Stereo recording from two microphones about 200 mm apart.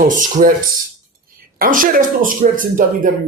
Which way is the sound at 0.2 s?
40° right (ahead or behind).